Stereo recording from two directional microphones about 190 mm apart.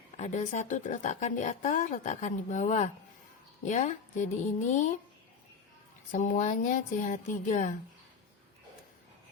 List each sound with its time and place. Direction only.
0.2 s a woman's voice: 40° left (ahead or behind)
6.1 s a woman's voice: 40° left (ahead or behind)